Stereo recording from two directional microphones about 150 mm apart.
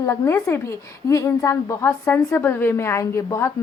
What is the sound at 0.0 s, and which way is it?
A woman's voice, 20° left (ahead or behind).